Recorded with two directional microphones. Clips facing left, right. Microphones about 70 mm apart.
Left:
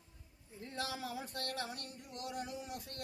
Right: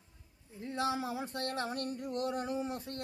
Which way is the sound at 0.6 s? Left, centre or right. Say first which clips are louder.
Right 8 dB; right.